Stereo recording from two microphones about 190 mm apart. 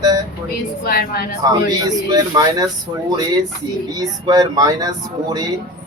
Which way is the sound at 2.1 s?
20° right (ahead or behind).